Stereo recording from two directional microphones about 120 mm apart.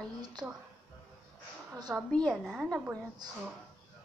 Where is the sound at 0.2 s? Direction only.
35° right (ahead or behind).